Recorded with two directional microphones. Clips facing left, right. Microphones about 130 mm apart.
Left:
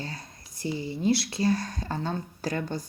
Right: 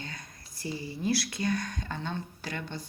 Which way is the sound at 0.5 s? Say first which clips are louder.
Left 5 dB; 25° left (ahead or behind).